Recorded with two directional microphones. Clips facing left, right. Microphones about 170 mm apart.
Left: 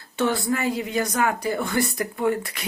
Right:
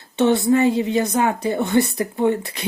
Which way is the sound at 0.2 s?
20° right (ahead or behind).